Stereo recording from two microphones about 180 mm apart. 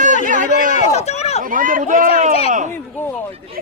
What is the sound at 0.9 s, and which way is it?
Speech, 40° left (ahead or behind).